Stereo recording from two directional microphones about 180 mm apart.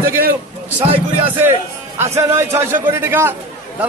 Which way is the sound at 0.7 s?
10° right (ahead or behind).